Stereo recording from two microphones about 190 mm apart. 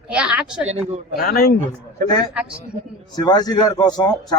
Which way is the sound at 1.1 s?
55° left (ahead or behind).